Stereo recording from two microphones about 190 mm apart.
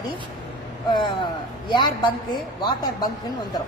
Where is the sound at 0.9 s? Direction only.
25° left (ahead or behind).